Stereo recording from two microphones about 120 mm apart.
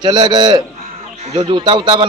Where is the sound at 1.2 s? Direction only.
60° right (ahead or behind).